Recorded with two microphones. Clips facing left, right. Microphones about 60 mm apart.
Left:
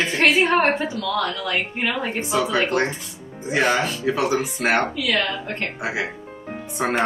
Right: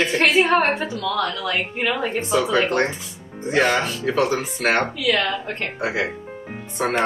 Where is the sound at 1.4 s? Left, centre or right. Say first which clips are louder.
Right 1 dB; centre.